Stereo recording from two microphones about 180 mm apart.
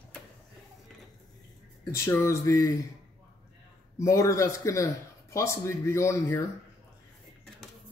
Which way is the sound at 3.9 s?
15° left (ahead or behind).